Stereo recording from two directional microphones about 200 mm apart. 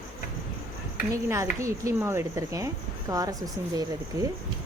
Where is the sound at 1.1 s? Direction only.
15° right (ahead or behind).